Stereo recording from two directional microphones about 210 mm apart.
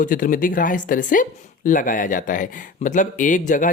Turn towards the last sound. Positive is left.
turn(degrees=40)  # may be behind; listen again after turning